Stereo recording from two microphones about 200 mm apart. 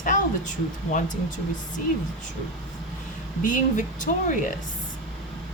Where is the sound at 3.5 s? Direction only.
40° left (ahead or behind).